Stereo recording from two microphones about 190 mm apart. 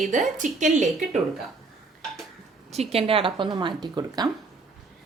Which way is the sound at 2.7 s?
35° right (ahead or behind).